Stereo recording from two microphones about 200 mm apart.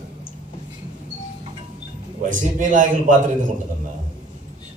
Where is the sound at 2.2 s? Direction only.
40° right (ahead or behind).